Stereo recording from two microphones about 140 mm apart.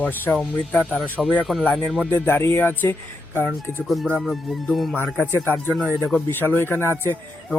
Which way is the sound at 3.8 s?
Centre (ahead or behind).